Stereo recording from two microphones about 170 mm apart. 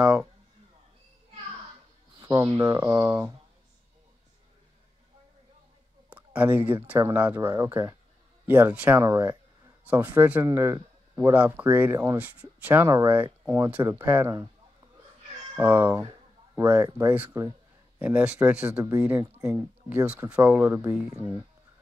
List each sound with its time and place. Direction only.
0.0 s a man's voice: 5° right (ahead or behind)
2.1 s speech: 20° right (ahead or behind)
6.0 s speech: 10° right (ahead or behind)
15.5 s speech: 10° right (ahead or behind)